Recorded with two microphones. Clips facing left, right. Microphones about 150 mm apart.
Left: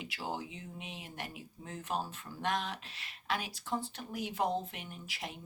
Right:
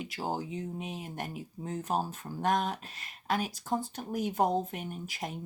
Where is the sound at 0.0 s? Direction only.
45° right (ahead or behind).